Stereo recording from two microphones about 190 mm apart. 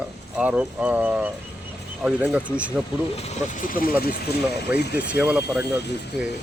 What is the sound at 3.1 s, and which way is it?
Speech, 35° left (ahead or behind).